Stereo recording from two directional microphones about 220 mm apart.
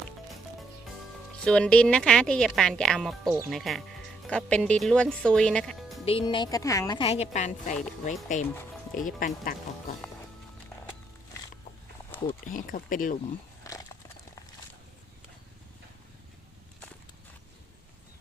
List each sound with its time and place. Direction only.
1.5 s speech: 5° left (ahead or behind)
6.1 s speech: 25° left (ahead or behind); by 9.6 s 40° left (ahead or behind)
12.5 s speech: 35° left (ahead or behind)
13.7 s horse: 15° left (ahead or behind)